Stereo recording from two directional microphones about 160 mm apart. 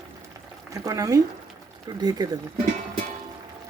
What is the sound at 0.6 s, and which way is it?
Speech, 20° right (ahead or behind).